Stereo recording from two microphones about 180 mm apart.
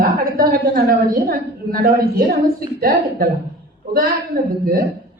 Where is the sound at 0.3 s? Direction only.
55° right (ahead or behind).